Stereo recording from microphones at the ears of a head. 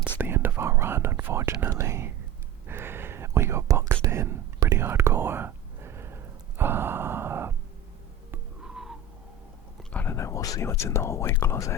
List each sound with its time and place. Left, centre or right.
0.3 s speech: right
2.6 s whispering: right
10.1 s speech: left